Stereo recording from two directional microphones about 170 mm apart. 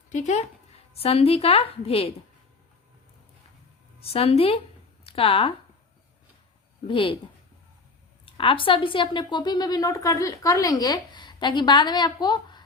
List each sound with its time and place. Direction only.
0.1 s speech: 45° left (ahead or behind)
4.0 s speech: 35° left (ahead or behind)
6.8 s speech: 30° left (ahead or behind)
8.2 s a woman's voice: 30° left (ahead or behind)